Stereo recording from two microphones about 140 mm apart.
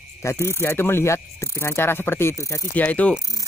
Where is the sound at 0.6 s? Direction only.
15° left (ahead or behind).